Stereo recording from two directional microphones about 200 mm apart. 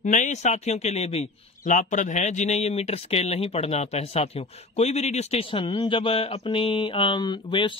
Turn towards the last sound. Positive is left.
turn(degrees=25)  # may be behind; listen again after turning